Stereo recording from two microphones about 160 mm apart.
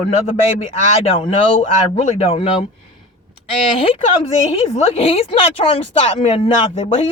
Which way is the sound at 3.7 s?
35° left (ahead or behind).